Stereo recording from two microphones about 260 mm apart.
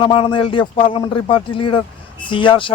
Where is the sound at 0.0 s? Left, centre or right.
Centre.